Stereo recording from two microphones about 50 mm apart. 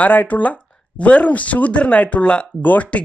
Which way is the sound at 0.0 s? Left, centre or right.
Left.